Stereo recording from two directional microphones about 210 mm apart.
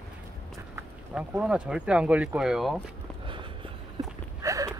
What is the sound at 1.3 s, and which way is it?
Speech, 5° right (ahead or behind).